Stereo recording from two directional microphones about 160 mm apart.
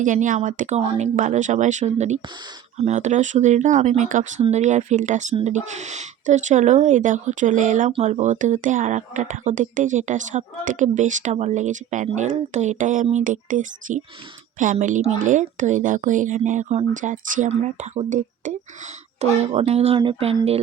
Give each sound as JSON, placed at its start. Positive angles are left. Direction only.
{"t": 0.0, "sound": "speech", "side_deg": -50}